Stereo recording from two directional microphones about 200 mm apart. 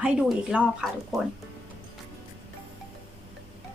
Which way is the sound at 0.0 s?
5° right (ahead or behind).